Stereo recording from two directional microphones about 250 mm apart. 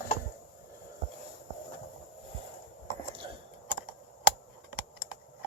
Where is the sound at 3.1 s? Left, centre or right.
Centre.